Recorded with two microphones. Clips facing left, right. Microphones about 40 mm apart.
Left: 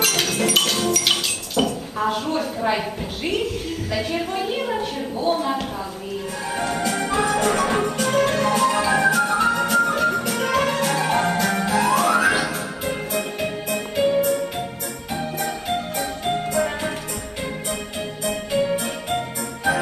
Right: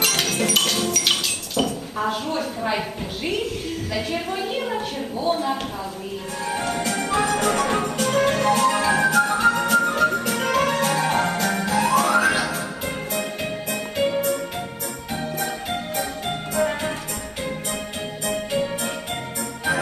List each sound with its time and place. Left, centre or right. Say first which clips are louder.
0.0 s a sound: left 1 dB; centre
3.9 s a woman's voice: left 2 dB; centre
6.5 s a woman's voice: left 1 dB; centre
7.0 s music: even; centre
15.1 s organ: left 1 dB; centre
16.0 s music: left 3 dB; centre
18.3 s music: left 3 dB; centre